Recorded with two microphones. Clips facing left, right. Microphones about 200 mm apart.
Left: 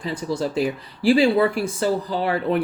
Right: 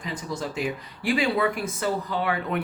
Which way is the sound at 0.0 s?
30° left (ahead or behind).